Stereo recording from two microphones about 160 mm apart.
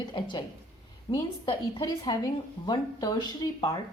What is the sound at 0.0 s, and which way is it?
A woman's voice, 30° left (ahead or behind).